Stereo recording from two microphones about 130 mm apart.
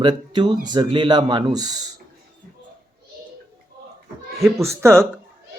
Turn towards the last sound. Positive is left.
turn(degrees=-20)  # may be behind; listen again after turning